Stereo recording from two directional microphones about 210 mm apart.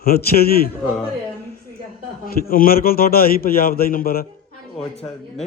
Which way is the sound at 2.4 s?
45° left (ahead or behind).